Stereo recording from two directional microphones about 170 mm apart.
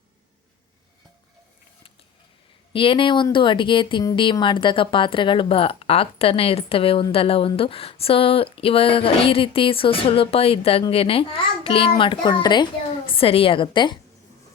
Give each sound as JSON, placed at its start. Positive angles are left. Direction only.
{"t": 2.7, "sound": "speech", "side_deg": 30}